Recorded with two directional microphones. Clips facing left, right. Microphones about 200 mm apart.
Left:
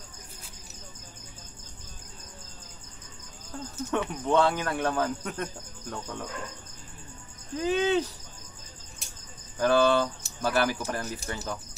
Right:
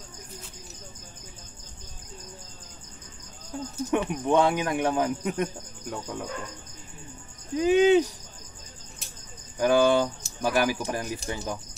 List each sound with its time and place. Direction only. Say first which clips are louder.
3.5 s speech: right 3 dB; 15° right (ahead or behind)
7.5 s speech: right 6 dB; 15° right (ahead or behind)
9.6 s speech: right 2 dB; 15° right (ahead or behind)